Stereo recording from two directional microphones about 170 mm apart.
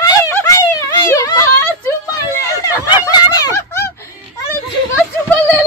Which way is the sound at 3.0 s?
20° left (ahead or behind).